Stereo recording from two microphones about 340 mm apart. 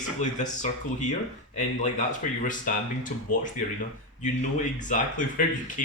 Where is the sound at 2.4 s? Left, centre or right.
Left.